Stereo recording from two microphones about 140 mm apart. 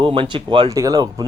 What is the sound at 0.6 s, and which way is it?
Speech, 25° right (ahead or behind).